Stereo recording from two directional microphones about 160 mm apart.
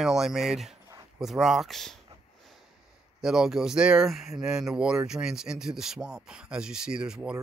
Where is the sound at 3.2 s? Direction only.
5° right (ahead or behind).